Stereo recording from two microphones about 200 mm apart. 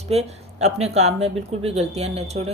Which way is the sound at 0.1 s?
30° right (ahead or behind).